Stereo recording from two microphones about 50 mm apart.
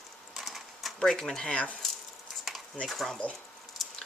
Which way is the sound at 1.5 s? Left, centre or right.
Left.